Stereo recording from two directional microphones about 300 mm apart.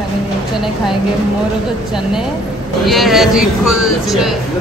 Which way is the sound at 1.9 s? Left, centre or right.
Centre.